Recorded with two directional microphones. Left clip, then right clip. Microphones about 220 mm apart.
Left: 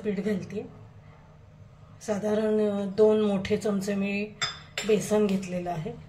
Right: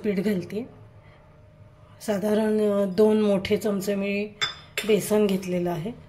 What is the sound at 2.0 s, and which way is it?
Speech, 40° right (ahead or behind).